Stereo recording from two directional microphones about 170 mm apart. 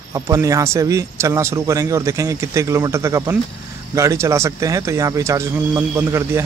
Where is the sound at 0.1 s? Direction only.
20° right (ahead or behind).